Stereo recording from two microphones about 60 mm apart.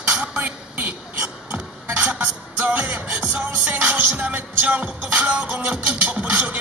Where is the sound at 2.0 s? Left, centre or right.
Right.